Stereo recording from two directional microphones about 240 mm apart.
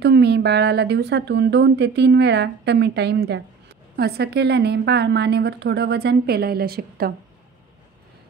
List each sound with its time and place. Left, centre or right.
0.0 s speech: right